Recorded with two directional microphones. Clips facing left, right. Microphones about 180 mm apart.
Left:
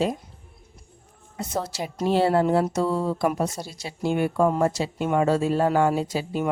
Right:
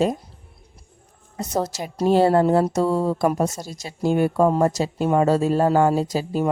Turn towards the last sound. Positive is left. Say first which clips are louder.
# right 3 dB
turn(degrees=-40)  # may be behind; listen again after turning